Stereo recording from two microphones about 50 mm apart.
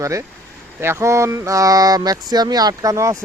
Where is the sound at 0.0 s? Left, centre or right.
Right.